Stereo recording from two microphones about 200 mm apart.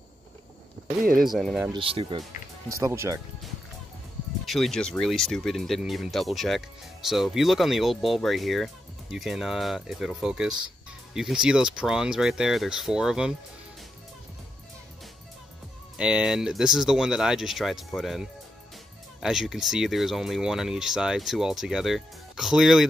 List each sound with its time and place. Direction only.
1.2 s speech: centre (ahead or behind)
1.7 s speech: 25° right (ahead or behind)
2.7 s speech: 15° right (ahead or behind)
4.5 s speech: centre (ahead or behind)
16.0 s speech: 5° right (ahead or behind)